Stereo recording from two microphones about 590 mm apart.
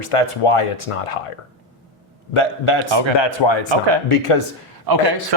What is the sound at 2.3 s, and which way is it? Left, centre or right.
A man's voice, left.